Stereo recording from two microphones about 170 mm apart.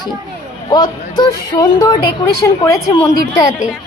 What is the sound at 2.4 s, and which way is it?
Speech, 20° left (ahead or behind).